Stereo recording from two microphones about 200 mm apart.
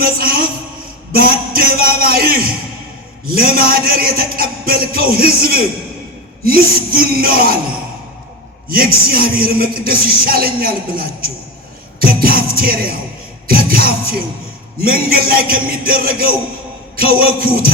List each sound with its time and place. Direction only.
0.0 s a sound: 50° right (ahead or behind)
1.1 s a man's voice: 50° right (ahead or behind)
8.7 s speech: 50° right (ahead or behind)